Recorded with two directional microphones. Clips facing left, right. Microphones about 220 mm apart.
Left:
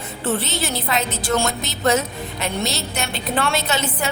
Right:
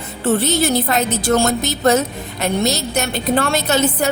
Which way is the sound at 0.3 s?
40° right (ahead or behind).